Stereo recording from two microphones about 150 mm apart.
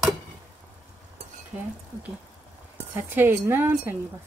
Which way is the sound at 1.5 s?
5° right (ahead or behind).